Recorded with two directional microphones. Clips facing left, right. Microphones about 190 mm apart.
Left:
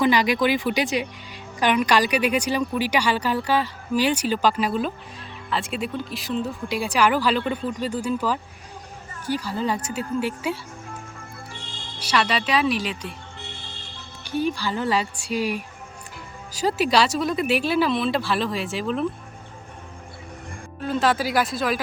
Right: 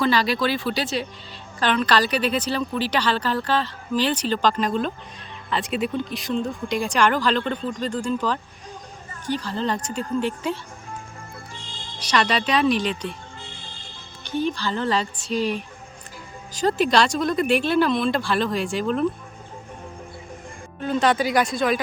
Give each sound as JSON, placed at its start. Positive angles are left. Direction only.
{"t": 0.0, "sound": "a woman's voice", "side_deg": 15}
{"t": 11.9, "sound": "speech", "side_deg": 5}
{"t": 14.3, "sound": "a woman's voice", "side_deg": 10}
{"t": 20.8, "sound": "speech", "side_deg": 0}